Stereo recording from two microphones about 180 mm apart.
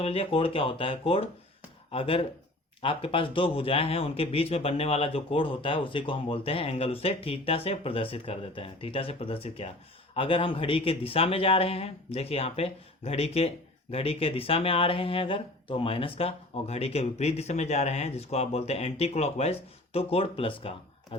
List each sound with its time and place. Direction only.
0.0 s speech: 30° left (ahead or behind)